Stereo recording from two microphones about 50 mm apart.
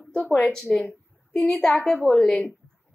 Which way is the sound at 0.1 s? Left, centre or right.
Centre.